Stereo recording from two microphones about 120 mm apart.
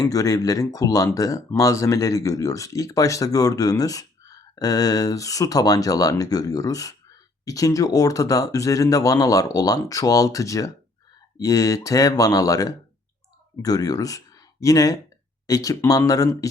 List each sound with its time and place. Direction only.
0.0 s speech: 30° left (ahead or behind)